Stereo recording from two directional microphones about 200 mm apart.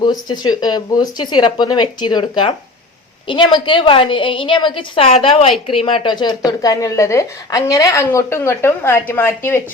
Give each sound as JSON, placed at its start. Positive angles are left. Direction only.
{"t": 0.0, "sound": "speech", "side_deg": 20}